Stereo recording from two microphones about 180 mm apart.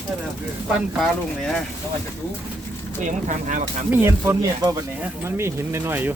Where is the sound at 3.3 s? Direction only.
45° right (ahead or behind).